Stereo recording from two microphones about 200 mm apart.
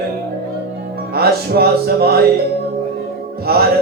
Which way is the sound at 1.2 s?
50° right (ahead or behind).